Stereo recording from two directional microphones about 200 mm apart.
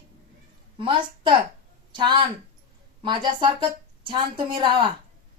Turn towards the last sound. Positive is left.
turn(degrees=-25)  # may be behind; listen again after turning